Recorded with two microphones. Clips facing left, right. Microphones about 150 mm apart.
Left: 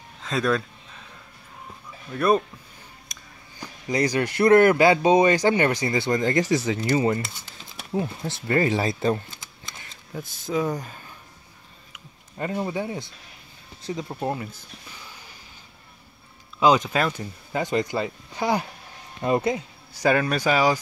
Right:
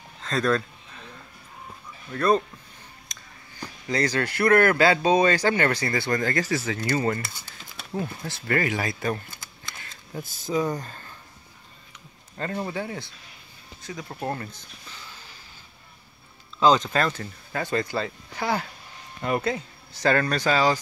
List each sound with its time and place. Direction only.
0.2 s speech: 5° left (ahead or behind)
2.1 s speech: 10° left (ahead or behind)
3.9 s speech: 15° left (ahead or behind)
10.1 s speech: 5° right (ahead or behind)
11.9 s a sound: 15° left (ahead or behind)
13.8 s speech: 25° left (ahead or behind)
14.2 s speech: 10° left (ahead or behind)
16.5 s speech: 10° left (ahead or behind)